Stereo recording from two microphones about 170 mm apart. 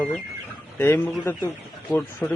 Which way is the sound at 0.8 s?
15° left (ahead or behind).